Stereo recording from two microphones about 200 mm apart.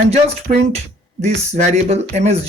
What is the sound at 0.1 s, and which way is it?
Speech, 30° right (ahead or behind).